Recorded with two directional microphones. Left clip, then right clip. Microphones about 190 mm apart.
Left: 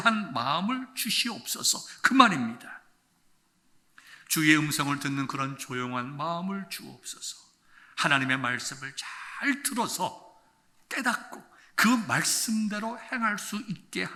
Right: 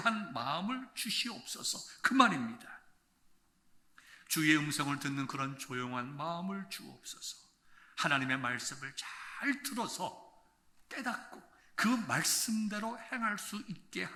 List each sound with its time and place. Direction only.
0.0 s a man's voice: 20° left (ahead or behind)
2.0 s a man's voice: 15° left (ahead or behind)
3.9 s a man's voice: 10° left (ahead or behind)
9.6 s a man's voice: 15° left (ahead or behind)
12.0 s a man's voice: 5° left (ahead or behind)